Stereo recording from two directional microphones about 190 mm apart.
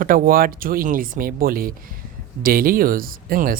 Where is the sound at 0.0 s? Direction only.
50° right (ahead or behind).